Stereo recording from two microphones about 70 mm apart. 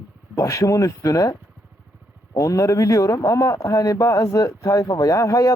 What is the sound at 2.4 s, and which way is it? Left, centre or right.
A man's voice, left.